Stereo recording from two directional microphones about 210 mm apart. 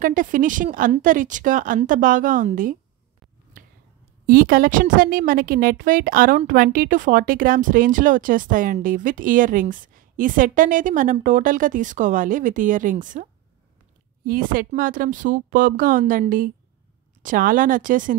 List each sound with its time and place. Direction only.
0.0 s a woman's voice: 40° right (ahead or behind)
3.6 s finger snapping: 40° right (ahead or behind)
4.3 s a woman's voice: 45° right (ahead or behind)